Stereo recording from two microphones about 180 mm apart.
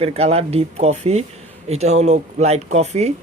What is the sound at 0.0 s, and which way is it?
Speech, 35° right (ahead or behind).